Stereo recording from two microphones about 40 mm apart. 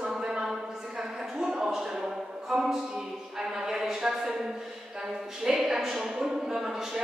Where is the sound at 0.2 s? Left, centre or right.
Right.